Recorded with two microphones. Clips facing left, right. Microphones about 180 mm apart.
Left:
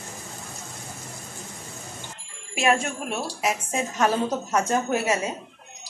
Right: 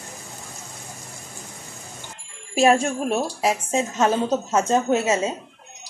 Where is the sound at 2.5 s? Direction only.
35° right (ahead or behind).